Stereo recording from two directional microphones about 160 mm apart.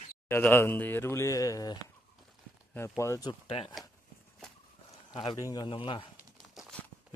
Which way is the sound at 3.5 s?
35° left (ahead or behind).